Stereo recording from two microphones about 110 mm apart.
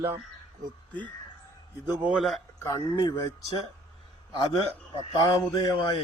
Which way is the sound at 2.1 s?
Centre (ahead or behind).